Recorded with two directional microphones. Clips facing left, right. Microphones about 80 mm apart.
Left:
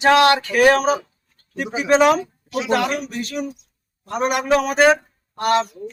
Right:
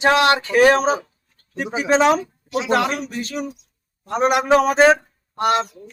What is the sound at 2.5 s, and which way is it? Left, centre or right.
Speech, right.